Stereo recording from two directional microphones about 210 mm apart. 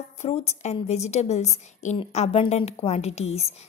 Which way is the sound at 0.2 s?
30° left (ahead or behind).